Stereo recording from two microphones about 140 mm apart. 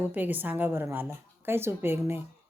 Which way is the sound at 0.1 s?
10° right (ahead or behind).